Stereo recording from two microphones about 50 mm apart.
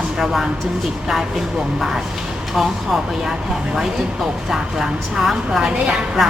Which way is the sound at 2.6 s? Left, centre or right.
Centre.